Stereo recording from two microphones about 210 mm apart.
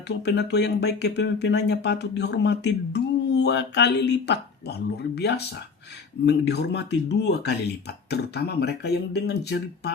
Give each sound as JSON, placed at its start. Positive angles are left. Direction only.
{"t": 0.1, "sound": "speech", "side_deg": 55}